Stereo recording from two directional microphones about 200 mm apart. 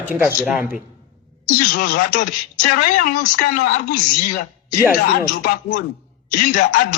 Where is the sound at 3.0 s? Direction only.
45° left (ahead or behind).